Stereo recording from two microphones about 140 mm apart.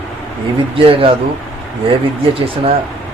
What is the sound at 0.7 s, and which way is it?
Speech, 40° right (ahead or behind).